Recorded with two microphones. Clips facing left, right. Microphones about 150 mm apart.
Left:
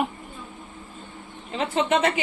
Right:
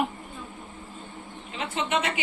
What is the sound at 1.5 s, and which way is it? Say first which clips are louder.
Speech: left 6 dB; 35° left (ahead or behind).